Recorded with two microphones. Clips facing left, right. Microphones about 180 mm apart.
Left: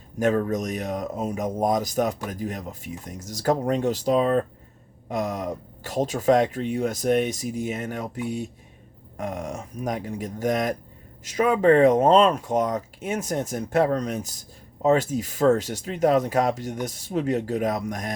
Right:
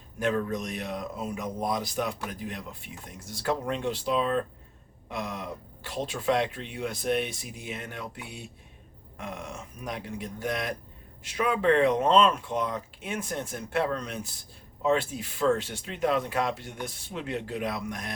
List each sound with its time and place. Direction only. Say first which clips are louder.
0.2 s speech: left 6 dB; 45° left (ahead or behind)